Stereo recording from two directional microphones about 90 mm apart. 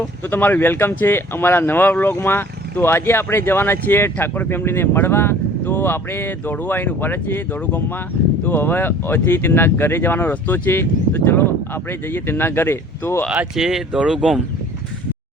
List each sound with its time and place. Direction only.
0.3 s speech: 20° left (ahead or behind)
13.6 s speech: 5° right (ahead or behind)